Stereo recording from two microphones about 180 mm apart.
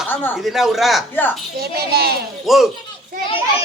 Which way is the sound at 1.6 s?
60° right (ahead or behind).